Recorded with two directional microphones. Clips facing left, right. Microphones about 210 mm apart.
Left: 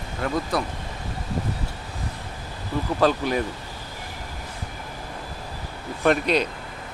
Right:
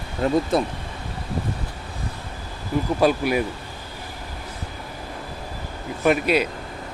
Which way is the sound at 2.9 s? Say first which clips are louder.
Right 1 dB; 10° right (ahead or behind).